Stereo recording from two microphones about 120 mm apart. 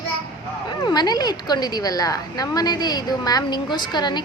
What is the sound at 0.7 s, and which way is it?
A woman's voice, 35° left (ahead or behind).